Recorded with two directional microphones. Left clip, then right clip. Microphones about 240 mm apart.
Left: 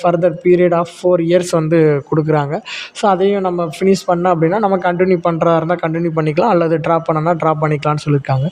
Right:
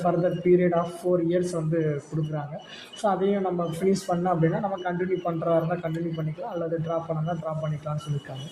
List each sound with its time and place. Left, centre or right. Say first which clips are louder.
0.0 s speech: left 11 dB; left